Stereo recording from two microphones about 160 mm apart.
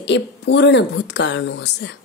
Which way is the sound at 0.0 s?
90° left.